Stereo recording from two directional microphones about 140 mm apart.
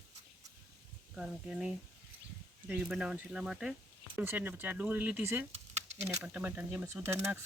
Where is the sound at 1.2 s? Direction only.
5° right (ahead or behind).